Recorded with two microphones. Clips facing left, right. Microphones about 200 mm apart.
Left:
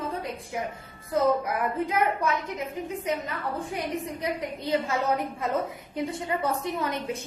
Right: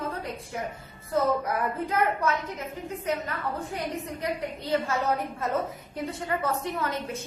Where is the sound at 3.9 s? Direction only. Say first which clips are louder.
Left 1 dB; 15° left (ahead or behind).